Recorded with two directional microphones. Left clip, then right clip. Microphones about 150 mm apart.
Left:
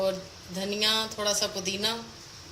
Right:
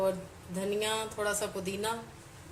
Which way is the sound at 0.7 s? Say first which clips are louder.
Left 6 dB; 70° right (ahead or behind).